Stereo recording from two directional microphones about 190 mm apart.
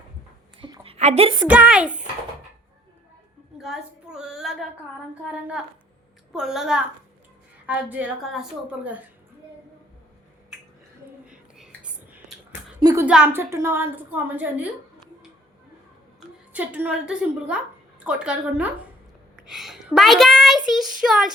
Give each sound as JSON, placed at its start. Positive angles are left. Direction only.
{"t": 0.6, "sound": "a sound", "side_deg": -30}
{"t": 1.5, "sound": "a woman's voice", "side_deg": -5}
{"t": 3.6, "sound": "a sound", "side_deg": -5}
{"t": 6.3, "sound": "a child's voice", "side_deg": 0}
{"t": 11.3, "sound": "whispering", "side_deg": -5}
{"t": 12.8, "sound": "a woman's voice", "side_deg": -15}
{"t": 16.5, "sound": "a woman's voice", "side_deg": -10}